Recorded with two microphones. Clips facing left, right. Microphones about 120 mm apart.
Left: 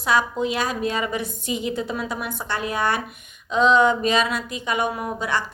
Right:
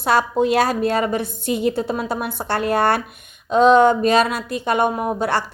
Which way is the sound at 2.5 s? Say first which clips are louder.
Right 6 dB; 60° right (ahead or behind).